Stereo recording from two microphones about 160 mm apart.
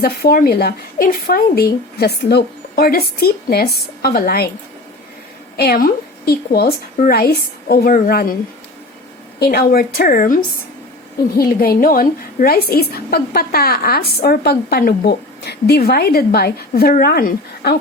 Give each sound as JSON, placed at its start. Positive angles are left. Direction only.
{"t": 0.0, "sound": "a woman's voice", "side_deg": 80}
{"t": 5.5, "sound": "a woman's voice", "side_deg": 75}
{"t": 9.4, "sound": "a woman's voice", "side_deg": 75}